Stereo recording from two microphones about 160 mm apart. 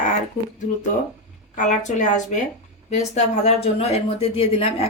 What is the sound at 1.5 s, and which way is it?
A woman's voice, 50° left (ahead or behind).